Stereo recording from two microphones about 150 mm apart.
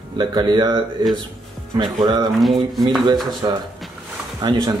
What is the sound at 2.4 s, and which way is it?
Speech, centre (ahead or behind).